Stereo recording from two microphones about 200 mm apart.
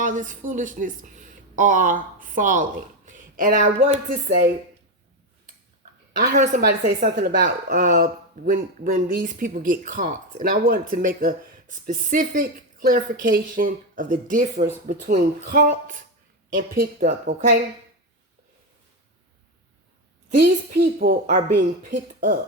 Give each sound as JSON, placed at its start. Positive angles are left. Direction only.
{"t": 0.0, "sound": "a woman's voice", "side_deg": -40}
{"t": 6.1, "sound": "speech", "side_deg": -50}
{"t": 20.4, "sound": "speech", "side_deg": -50}